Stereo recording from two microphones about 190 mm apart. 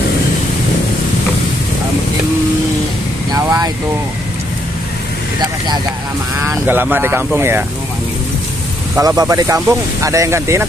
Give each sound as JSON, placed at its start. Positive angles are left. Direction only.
{"t": 3.3, "sound": "vehicle", "side_deg": -20}
{"t": 6.4, "sound": "speech", "side_deg": -10}
{"t": 8.9, "sound": "speech", "side_deg": -20}